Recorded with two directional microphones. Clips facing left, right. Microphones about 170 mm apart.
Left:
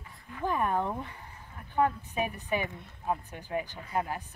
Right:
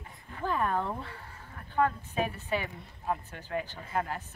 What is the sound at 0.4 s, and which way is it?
A woman's voice, 15° left (ahead or behind).